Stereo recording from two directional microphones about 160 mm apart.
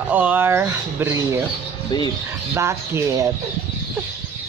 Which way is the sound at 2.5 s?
15° right (ahead or behind).